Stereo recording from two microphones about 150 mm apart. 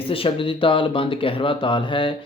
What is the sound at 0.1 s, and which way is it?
Speech, 35° left (ahead or behind).